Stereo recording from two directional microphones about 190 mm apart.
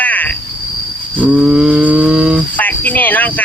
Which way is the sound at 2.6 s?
10° left (ahead or behind).